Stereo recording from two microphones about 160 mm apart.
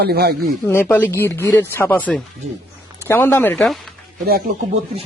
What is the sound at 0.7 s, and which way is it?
Speech, 10° left (ahead or behind).